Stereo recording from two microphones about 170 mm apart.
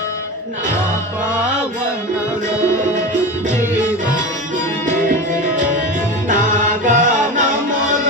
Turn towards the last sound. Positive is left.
turn(degrees=-45)  # may be behind; listen again after turning